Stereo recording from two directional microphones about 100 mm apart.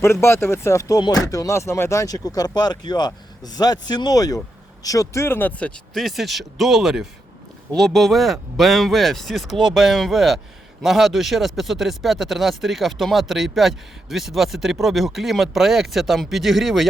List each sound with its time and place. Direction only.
0.0 s speech: 25° left (ahead or behind); by 16.9 s centre (ahead or behind)